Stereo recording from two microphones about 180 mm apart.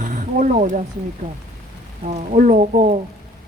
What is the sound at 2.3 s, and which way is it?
Speech, 45° right (ahead or behind).